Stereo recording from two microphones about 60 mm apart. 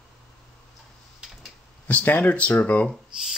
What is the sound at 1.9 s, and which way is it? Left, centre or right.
Speech, left.